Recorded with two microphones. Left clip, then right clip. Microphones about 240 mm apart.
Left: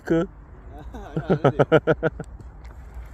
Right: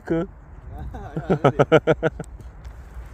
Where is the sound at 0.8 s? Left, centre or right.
Left.